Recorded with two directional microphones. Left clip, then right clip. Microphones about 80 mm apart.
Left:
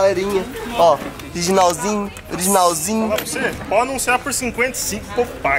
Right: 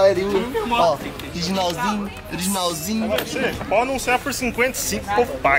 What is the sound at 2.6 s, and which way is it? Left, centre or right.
Speech, centre.